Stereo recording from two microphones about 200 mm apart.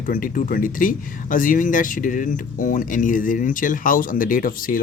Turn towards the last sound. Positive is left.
turn(degrees=45)  # may be behind; listen again after turning